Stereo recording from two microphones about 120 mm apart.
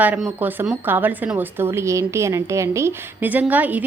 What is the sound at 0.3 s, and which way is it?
A woman's voice, 15° right (ahead or behind).